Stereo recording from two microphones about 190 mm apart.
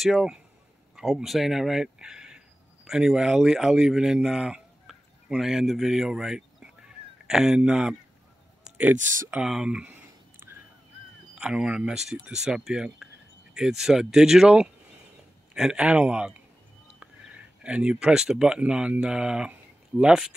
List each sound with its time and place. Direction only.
0.0 s speech: centre (ahead or behind)
8.6 s clicking: 5° right (ahead or behind)
9.3 s speech: 5° right (ahead or behind)
10.4 s a sound: 15° right (ahead or behind)
11.3 s speech: 5° right (ahead or behind)